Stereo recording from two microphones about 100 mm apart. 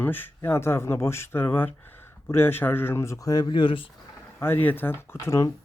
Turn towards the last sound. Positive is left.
turn(degrees=30)  # may be behind; listen again after turning